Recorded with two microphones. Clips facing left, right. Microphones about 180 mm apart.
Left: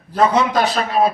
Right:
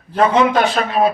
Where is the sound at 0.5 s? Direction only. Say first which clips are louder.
Right 1 dB; 35° left (ahead or behind).